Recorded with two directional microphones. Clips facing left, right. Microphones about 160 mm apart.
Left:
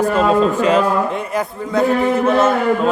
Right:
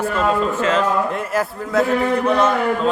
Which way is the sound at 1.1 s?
Centre (ahead or behind).